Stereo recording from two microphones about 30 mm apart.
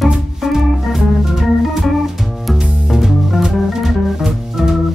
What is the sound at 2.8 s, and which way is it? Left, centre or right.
Music, centre.